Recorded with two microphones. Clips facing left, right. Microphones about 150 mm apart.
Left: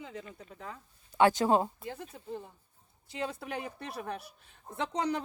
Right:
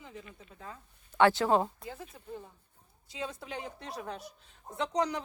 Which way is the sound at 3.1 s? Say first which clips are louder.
Left 3 dB; 60° left (ahead or behind).